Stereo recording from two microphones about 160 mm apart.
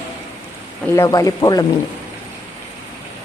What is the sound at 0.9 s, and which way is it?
Speech, 20° left (ahead or behind).